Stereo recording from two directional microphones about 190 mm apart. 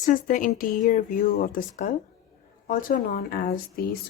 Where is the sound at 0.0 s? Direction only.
45° left (ahead or behind).